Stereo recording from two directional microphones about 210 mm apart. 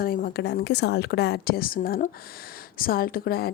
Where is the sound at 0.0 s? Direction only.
45° left (ahead or behind).